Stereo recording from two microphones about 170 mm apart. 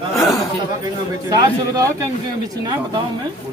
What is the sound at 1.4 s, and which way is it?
Speech, 20° right (ahead or behind).